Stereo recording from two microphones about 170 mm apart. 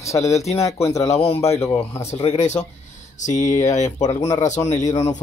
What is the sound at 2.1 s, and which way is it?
Speech, 40° left (ahead or behind).